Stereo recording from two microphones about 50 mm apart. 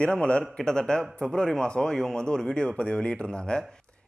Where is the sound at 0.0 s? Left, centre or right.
Centre.